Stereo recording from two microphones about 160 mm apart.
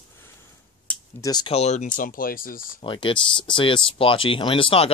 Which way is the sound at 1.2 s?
25° left (ahead or behind).